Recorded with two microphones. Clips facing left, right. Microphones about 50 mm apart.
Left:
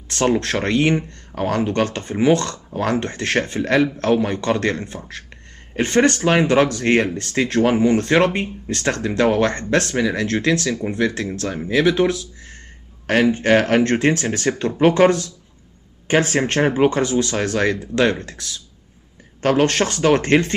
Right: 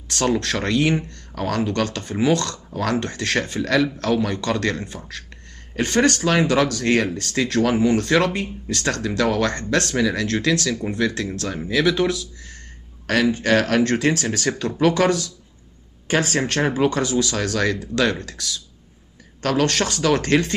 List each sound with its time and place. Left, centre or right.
0.1 s speech: left